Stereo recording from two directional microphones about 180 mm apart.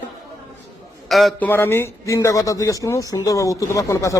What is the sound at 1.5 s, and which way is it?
A man's voice, 10° left (ahead or behind).